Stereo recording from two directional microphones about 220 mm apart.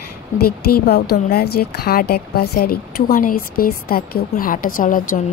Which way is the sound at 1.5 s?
45° left (ahead or behind).